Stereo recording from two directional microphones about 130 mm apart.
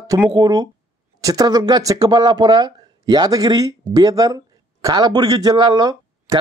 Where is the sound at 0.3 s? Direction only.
30° right (ahead or behind).